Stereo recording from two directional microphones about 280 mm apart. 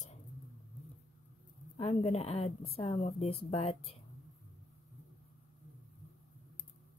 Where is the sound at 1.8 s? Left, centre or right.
Left.